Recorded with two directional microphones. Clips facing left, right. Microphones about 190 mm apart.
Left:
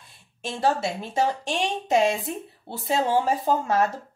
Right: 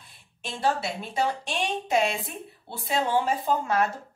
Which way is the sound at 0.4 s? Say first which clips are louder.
Left 3 dB; 45° left (ahead or behind).